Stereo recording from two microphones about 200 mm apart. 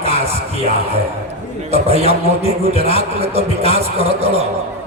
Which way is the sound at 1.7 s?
30° right (ahead or behind).